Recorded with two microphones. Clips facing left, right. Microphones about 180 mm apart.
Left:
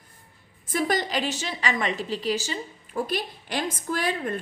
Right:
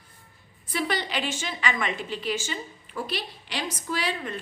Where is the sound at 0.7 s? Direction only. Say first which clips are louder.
Left 3 dB; 45° left (ahead or behind).